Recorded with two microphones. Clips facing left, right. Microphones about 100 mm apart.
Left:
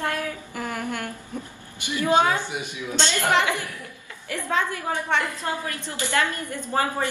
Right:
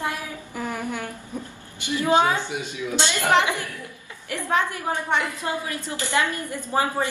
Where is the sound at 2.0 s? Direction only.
20° right (ahead or behind).